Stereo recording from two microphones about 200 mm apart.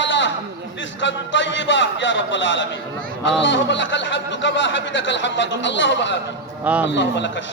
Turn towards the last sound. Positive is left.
turn(degrees=65)  # may be behind; listen again after turning